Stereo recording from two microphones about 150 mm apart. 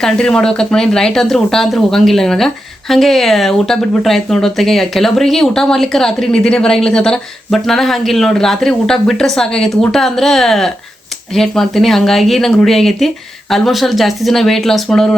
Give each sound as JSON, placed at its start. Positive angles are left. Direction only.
{"t": 0.0, "sound": "speech", "side_deg": 5}